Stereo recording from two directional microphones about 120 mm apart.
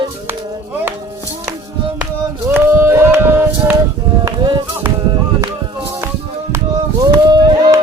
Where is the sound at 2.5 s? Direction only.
20° right (ahead or behind).